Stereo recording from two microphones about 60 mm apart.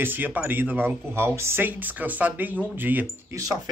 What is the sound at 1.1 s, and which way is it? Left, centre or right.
Speech, right.